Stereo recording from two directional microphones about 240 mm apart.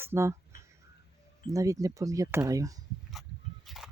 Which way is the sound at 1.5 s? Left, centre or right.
Centre.